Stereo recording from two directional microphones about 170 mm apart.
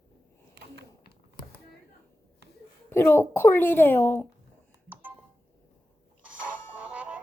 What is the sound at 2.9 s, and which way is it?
Speech, 15° left (ahead or behind).